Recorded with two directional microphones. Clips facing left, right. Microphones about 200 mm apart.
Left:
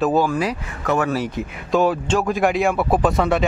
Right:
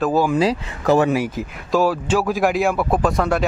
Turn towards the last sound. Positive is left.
turn(degrees=0)  # may be behind; listen again after turning